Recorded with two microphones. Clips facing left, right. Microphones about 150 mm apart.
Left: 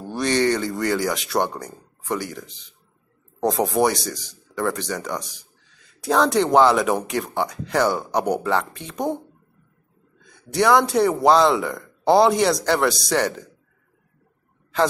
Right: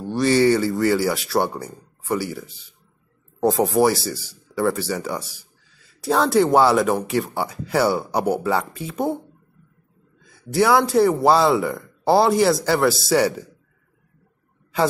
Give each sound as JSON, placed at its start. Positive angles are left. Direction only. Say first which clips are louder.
{"t": 0.0, "sound": "a man's voice", "louder": "right 4 dB", "side_deg": 0}
{"t": 10.2, "sound": "a man's voice", "louder": "right 1 dB", "side_deg": -5}